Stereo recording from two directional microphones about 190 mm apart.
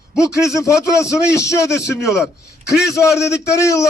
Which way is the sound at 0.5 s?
15° left (ahead or behind).